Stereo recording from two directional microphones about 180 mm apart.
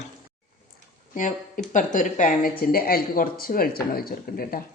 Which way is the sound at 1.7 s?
45° left (ahead or behind).